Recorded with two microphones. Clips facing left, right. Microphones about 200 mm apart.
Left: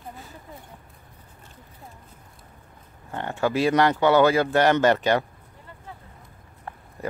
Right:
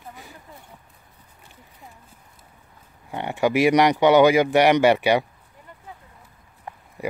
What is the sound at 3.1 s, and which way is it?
Speech, 15° right (ahead or behind).